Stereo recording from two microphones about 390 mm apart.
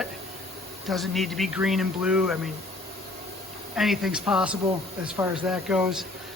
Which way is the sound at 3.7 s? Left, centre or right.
Centre.